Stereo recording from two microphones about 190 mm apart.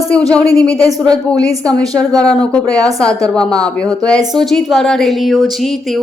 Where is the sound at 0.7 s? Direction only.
20° right (ahead or behind).